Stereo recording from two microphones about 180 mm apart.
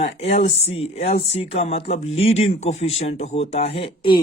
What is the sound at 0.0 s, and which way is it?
Speech, 35° left (ahead or behind).